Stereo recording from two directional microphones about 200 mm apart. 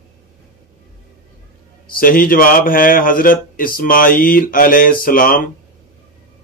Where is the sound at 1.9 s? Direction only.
45° left (ahead or behind).